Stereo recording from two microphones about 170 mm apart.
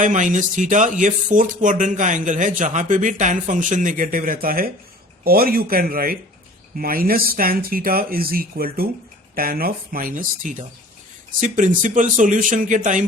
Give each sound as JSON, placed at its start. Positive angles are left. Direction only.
{"t": 0.0, "sound": "a man's voice", "side_deg": -50}